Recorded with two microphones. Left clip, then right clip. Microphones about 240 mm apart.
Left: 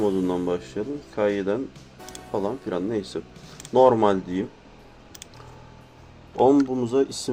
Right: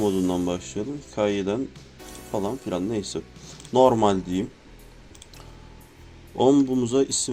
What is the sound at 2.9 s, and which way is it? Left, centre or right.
Speech, right.